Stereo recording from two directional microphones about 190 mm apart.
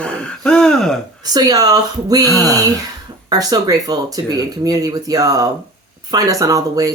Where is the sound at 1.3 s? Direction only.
20° right (ahead or behind).